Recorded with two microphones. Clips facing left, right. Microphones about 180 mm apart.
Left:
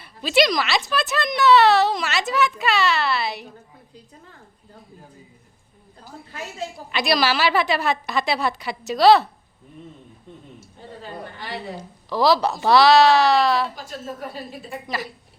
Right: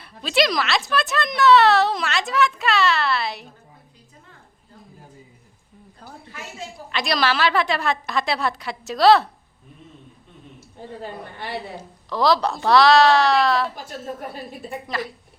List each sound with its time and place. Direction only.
0.0 s a woman's voice: centre (ahead or behind)
6.9 s a woman's voice: 5° left (ahead or behind)
11.8 s a woman's voice: centre (ahead or behind)